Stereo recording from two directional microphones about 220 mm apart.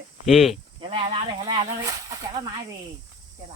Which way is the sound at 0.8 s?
25° right (ahead or behind).